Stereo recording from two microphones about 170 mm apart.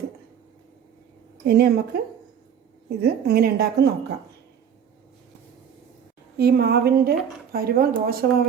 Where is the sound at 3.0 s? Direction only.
70° right (ahead or behind).